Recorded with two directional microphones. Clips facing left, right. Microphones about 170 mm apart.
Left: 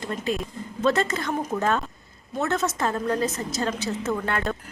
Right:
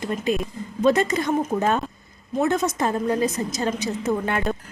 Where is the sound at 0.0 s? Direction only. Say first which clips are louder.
Right 4 dB; 20° right (ahead or behind).